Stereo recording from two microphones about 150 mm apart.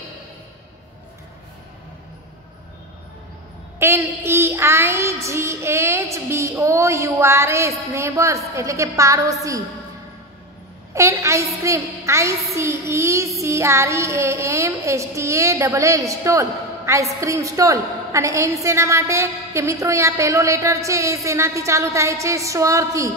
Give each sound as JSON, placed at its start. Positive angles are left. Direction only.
{"t": 3.8, "sound": "child singing", "side_deg": -15}
{"t": 10.9, "sound": "child singing", "side_deg": -20}